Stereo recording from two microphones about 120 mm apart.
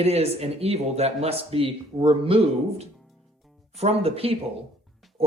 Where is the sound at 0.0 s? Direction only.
60° right (ahead or behind).